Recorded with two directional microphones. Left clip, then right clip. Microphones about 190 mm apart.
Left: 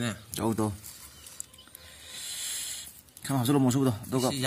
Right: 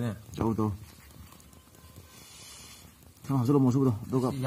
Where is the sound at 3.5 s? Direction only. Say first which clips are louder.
Right 1 dB; 20° left (ahead or behind).